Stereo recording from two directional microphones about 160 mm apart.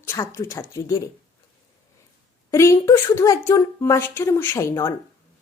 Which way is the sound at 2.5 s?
15° left (ahead or behind).